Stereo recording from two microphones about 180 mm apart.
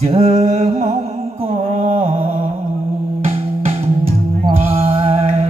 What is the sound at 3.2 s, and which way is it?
Music, 35° right (ahead or behind).